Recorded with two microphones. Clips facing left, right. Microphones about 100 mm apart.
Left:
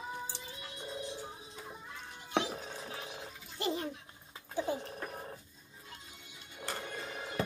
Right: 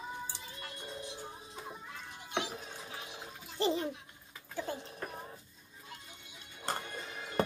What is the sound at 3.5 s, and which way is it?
Music, 30° right (ahead or behind).